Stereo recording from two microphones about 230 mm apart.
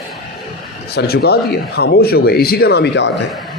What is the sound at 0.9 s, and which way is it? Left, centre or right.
Speech, left.